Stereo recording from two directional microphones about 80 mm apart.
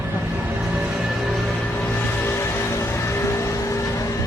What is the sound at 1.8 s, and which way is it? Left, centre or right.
Music, left.